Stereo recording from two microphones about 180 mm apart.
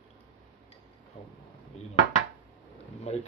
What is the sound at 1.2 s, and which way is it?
Speech, 30° left (ahead or behind).